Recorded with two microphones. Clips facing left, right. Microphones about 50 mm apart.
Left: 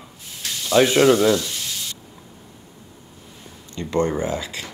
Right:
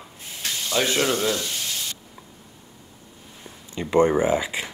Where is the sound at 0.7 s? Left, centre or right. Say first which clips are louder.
Left 8 dB; centre.